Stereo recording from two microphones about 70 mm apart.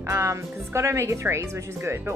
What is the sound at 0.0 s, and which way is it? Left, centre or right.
Speech, right.